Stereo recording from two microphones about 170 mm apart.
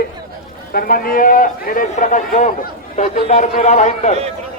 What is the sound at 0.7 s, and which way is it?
A man's voice, 60° left (ahead or behind).